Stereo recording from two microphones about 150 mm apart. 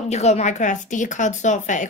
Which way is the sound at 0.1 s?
45° left (ahead or behind).